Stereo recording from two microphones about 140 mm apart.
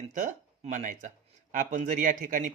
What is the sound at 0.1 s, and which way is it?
A man's voice, 65° right (ahead or behind).